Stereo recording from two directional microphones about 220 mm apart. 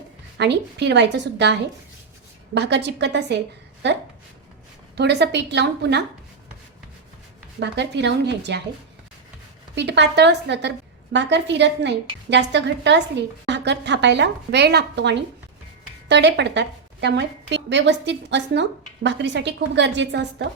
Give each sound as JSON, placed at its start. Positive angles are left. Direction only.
{"t": 0.3, "sound": "a woman's voice", "side_deg": -50}
{"t": 2.6, "sound": "a woman's voice", "side_deg": -50}
{"t": 7.6, "sound": "a woman's voice", "side_deg": -50}
{"t": 9.7, "sound": "a woman's voice", "side_deg": -50}